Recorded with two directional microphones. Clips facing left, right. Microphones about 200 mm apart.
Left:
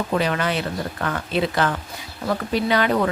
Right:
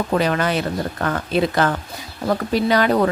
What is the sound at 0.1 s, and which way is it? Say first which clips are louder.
A woman's voice: right 3 dB; 45° right (ahead or behind).